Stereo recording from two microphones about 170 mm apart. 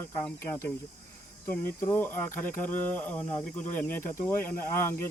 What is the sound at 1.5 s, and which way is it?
Speech, 10° left (ahead or behind).